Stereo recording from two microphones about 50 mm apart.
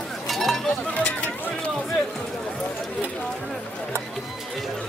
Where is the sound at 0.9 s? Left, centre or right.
Left.